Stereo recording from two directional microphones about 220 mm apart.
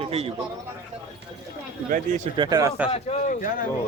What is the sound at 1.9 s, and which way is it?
Speech, 35° right (ahead or behind).